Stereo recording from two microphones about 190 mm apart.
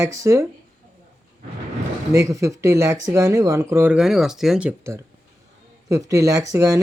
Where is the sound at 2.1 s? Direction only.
15° right (ahead or behind).